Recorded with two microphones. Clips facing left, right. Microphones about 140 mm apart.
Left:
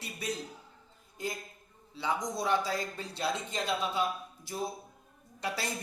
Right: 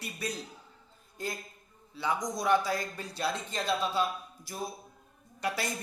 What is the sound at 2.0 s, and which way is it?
Speech, 30° left (ahead or behind).